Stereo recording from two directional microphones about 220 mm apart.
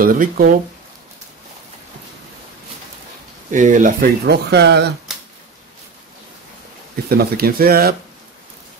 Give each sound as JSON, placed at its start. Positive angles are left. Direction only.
{"t": 0.0, "sound": "speech", "side_deg": -40}
{"t": 3.5, "sound": "speech", "side_deg": -35}
{"t": 7.1, "sound": "speech", "side_deg": -45}